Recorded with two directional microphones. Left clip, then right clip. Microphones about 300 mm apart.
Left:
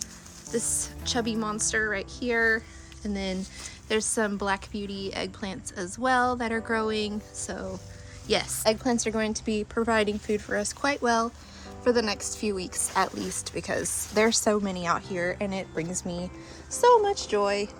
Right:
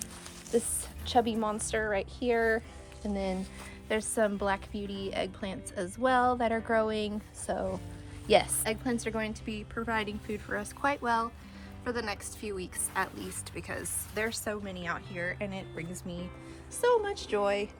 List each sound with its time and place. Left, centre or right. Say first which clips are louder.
1.0 s a woman's voice: right 2 dB; centre
8.6 s a woman's voice: left 8 dB; centre